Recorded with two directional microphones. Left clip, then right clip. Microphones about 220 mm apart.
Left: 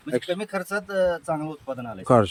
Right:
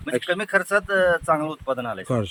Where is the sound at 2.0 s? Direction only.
10° left (ahead or behind).